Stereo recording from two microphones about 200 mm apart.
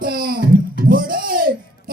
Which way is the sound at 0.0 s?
50° right (ahead or behind).